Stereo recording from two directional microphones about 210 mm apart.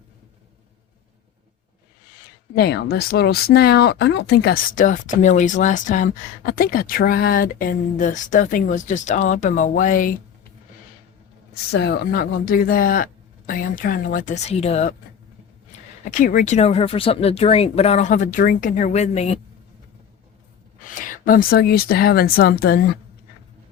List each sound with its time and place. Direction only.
2.6 s speech: 50° left (ahead or behind)
11.7 s speech: 50° left (ahead or behind); by 14.9 s 30° left (ahead or behind)
16.0 s speech: 40° left (ahead or behind)
20.9 s speech: 40° left (ahead or behind)